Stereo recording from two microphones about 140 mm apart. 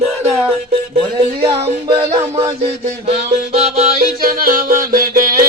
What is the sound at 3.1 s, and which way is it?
Music, 50° right (ahead or behind).